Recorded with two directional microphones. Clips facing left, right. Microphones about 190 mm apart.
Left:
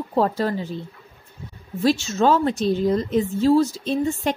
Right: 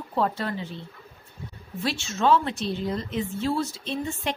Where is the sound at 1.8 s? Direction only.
40° left (ahead or behind).